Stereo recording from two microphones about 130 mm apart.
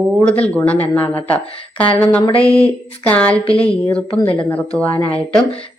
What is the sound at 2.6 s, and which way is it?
Speech, 10° left (ahead or behind).